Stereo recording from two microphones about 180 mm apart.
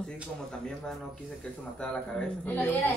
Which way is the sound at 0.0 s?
5° left (ahead or behind).